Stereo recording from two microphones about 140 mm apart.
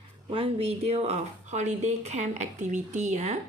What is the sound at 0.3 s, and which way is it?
Speech, 40° right (ahead or behind).